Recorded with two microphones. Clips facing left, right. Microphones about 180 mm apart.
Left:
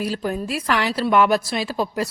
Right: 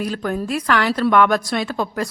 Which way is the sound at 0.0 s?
5° left (ahead or behind).